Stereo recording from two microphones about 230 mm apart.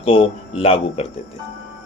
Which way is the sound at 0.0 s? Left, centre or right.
Left.